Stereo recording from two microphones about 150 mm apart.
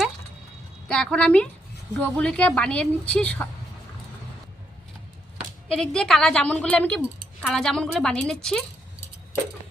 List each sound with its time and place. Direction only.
0.9 s speech: 5° left (ahead or behind)
5.6 s a woman's voice: 5° left (ahead or behind)